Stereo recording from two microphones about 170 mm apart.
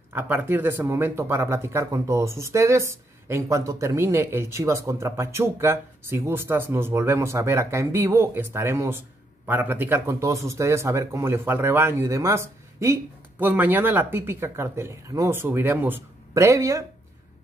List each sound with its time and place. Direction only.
0.1 s speech: 10° right (ahead or behind)